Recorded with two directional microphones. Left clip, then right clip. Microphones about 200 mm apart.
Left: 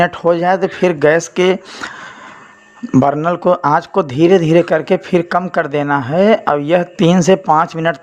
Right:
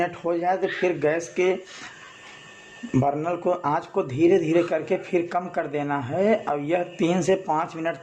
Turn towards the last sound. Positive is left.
turn(degrees=35)  # may be behind; listen again after turning